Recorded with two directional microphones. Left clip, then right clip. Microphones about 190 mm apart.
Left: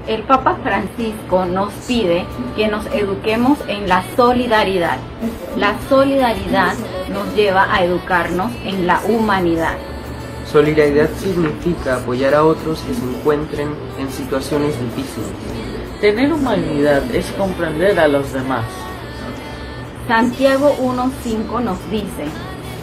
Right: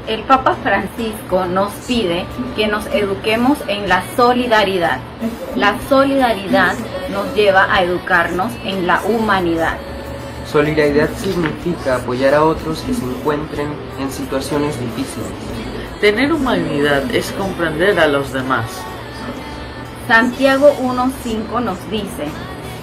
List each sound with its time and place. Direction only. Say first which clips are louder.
0.1 s a woman's voice: right 1 dB; centre (ahead or behind)
10.5 s speech: left 1 dB; 20° left (ahead or behind)
14.6 s a woman's voice: left 1 dB; centre (ahead or behind)
16.0 s a woman's voice: right 1 dB; 15° right (ahead or behind)
20.1 s a woman's voice: right 2 dB; centre (ahead or behind)